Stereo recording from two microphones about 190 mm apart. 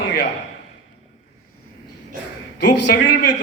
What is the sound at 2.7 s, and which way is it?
Speech, 70° left (ahead or behind).